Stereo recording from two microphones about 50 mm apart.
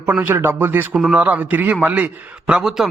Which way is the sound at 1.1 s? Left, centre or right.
Right.